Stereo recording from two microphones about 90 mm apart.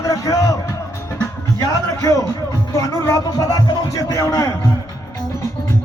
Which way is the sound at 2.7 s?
35° left (ahead or behind).